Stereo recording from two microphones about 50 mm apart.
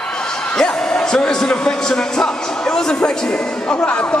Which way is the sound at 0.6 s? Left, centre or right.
Centre.